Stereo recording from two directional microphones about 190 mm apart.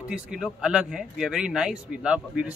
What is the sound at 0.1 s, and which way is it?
A man's voice, 5° right (ahead or behind).